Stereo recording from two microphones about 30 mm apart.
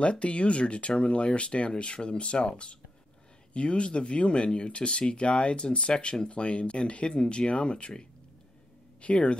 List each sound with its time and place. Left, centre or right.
0.0 s speech: left